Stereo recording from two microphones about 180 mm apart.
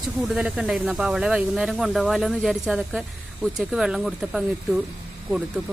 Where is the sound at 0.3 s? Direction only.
5° right (ahead or behind).